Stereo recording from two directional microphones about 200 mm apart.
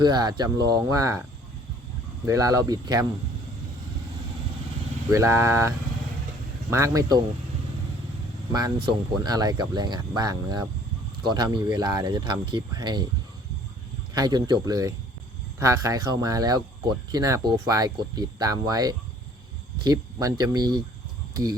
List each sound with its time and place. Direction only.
0.0 s speech: 20° right (ahead or behind)
2.2 s speech: 15° right (ahead or behind)
5.1 s speech: 15° right (ahead or behind)
8.5 s speech: 20° right (ahead or behind)
14.1 s speech: 20° right (ahead or behind)